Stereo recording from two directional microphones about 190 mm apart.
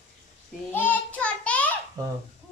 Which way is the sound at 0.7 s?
10° left (ahead or behind).